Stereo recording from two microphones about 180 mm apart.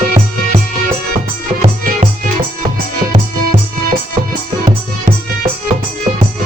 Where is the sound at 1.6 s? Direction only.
45° right (ahead or behind).